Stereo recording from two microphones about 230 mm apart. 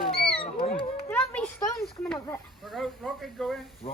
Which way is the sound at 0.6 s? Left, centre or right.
Left.